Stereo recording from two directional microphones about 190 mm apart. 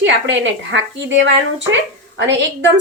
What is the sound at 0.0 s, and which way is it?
A woman's voice, 75° right (ahead or behind).